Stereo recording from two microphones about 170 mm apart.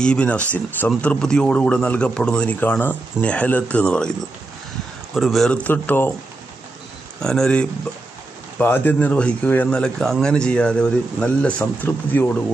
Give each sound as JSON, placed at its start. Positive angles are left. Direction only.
{"t": 0.0, "sound": "a man's voice", "side_deg": 5}
{"t": 5.1, "sound": "a man's voice", "side_deg": 0}
{"t": 7.2, "sound": "a man's voice", "side_deg": 5}